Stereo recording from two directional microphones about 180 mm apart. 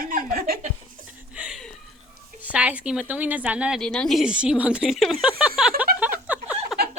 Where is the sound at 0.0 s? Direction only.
50° right (ahead or behind).